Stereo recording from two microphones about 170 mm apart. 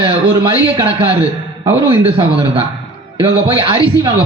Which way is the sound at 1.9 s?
30° right (ahead or behind).